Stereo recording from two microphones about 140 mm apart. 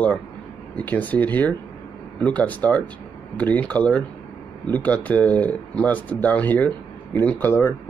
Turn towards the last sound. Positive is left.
turn(degrees=15)  # may be behind; listen again after turning